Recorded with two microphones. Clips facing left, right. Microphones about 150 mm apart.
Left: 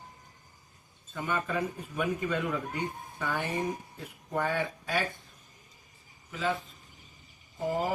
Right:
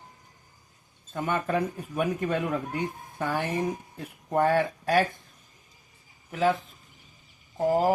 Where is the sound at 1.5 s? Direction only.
50° right (ahead or behind).